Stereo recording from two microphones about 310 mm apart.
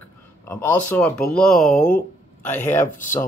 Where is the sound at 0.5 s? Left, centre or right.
Centre.